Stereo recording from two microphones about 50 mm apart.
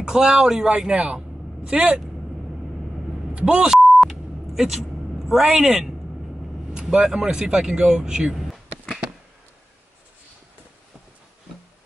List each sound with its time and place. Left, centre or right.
0.0 s speech: centre
3.3 s speech: right
4.0 s a sound: centre
6.7 s speech: centre